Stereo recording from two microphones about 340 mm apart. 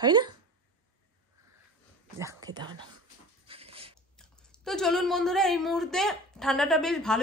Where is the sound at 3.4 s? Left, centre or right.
Centre.